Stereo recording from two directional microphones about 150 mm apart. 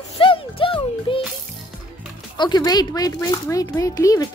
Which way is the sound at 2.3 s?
30° left (ahead or behind).